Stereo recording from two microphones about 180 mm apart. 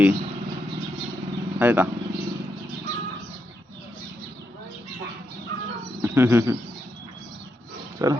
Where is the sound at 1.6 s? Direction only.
10° right (ahead or behind).